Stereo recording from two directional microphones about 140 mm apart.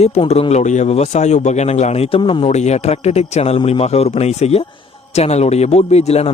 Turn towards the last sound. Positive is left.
turn(degrees=50)  # may be behind; listen again after turning